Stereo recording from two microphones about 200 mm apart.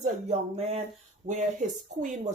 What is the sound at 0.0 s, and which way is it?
Speech, 30° right (ahead or behind).